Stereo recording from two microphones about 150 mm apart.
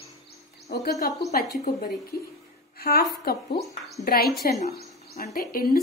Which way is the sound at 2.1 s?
90° left.